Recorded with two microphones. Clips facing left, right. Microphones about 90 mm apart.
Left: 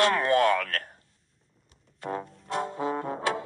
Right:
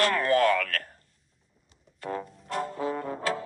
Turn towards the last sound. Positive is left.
turn(degrees=15)  # may be behind; listen again after turning